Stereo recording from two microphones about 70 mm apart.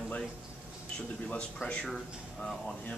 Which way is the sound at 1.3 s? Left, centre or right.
Centre.